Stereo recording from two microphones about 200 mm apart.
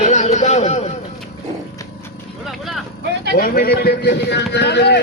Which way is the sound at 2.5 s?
Centre (ahead or behind).